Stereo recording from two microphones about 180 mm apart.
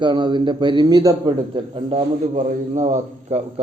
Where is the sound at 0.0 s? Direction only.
25° right (ahead or behind).